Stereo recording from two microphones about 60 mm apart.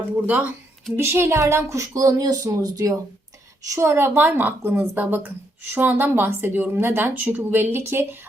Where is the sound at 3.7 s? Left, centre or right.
Right.